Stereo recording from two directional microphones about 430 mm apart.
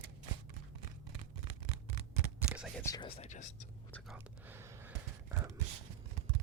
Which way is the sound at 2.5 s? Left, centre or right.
Centre.